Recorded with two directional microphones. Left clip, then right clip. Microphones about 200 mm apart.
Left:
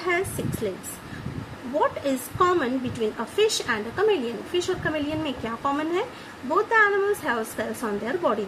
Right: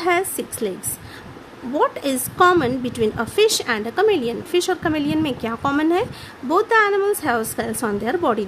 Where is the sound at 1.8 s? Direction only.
60° right (ahead or behind).